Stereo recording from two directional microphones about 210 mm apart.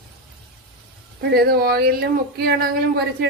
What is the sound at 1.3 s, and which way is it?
Speech, 50° right (ahead or behind).